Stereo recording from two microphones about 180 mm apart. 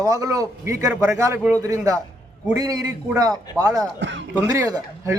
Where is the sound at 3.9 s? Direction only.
80° right.